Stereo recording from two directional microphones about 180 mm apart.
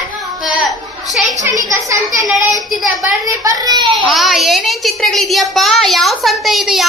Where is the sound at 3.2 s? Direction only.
20° right (ahead or behind).